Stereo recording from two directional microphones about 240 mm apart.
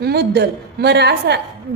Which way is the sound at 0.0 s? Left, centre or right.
Right.